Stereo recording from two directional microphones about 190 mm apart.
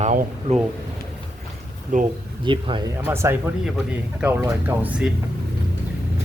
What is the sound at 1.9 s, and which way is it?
Speech, 45° right (ahead or behind).